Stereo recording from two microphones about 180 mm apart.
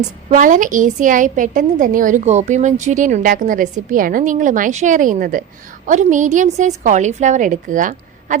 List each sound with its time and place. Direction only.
0.3 s a woman's voice: 45° right (ahead or behind)